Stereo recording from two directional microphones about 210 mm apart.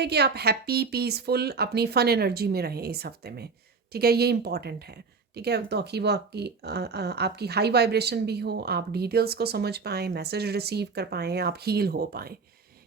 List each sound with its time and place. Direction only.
0.0 s speech: 50° right (ahead or behind)